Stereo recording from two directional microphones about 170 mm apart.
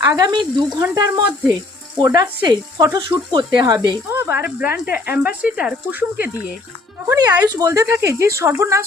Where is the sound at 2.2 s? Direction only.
25° right (ahead or behind).